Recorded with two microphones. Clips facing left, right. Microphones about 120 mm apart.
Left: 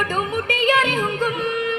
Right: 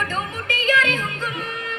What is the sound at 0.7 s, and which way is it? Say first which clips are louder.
Music: left 1 dB; 55° left (ahead or behind).